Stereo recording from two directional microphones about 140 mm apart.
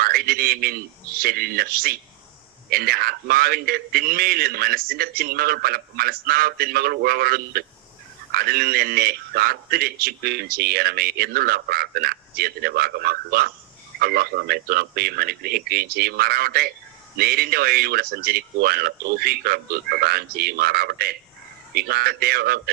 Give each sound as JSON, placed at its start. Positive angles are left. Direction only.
{"t": 0.0, "sound": "a man's voice", "side_deg": -90}